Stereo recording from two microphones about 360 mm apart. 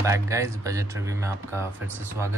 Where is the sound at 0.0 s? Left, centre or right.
Centre.